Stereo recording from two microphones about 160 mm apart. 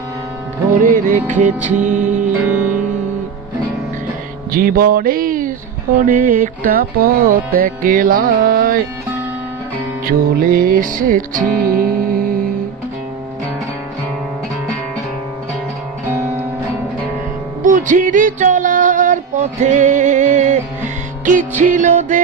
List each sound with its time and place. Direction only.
0.8 s music: 60° right (ahead or behind)
2.5 s music: 10° right (ahead or behind)
4.5 s music: 65° right (ahead or behind)
10.1 s music: 60° right (ahead or behind)
17.6 s music: 50° right (ahead or behind)